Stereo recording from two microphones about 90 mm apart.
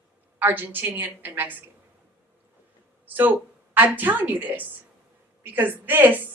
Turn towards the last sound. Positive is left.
turn(degrees=-20)  # may be behind; listen again after turning